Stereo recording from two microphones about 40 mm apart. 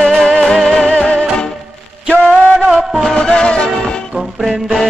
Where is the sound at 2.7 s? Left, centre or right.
Centre.